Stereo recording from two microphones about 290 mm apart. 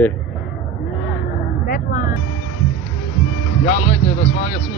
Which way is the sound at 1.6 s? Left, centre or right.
Left.